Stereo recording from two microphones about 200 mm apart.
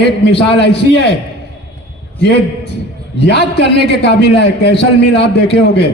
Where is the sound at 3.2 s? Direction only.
60° left (ahead or behind).